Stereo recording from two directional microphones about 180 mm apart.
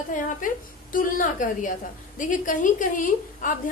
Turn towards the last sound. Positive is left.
turn(degrees=45)  # may be behind; listen again after turning